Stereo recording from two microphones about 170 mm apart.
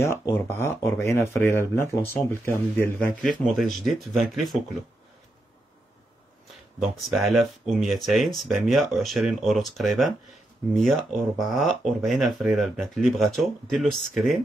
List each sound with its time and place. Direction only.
0.0 s speech: 15° left (ahead or behind)
3.5 s speech: centre (ahead or behind)
6.5 s speech: centre (ahead or behind)